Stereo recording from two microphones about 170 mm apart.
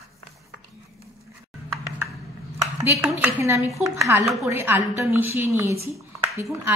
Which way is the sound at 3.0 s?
15° right (ahead or behind).